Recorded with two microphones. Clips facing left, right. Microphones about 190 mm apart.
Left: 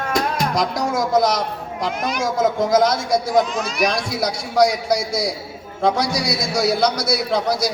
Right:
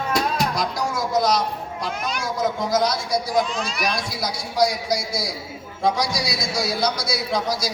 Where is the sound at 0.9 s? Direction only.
50° left (ahead or behind).